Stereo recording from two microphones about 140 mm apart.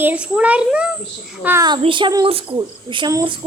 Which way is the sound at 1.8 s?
35° right (ahead or behind).